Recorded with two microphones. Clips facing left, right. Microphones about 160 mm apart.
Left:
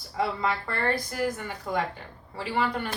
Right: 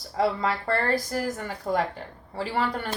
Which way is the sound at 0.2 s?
35° right (ahead or behind).